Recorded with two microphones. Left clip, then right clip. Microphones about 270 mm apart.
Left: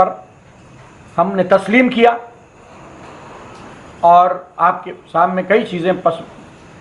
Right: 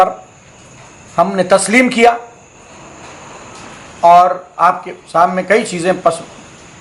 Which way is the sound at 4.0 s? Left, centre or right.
Left.